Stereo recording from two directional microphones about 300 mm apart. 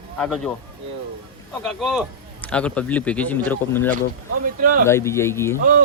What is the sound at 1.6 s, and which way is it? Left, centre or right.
Speech, centre.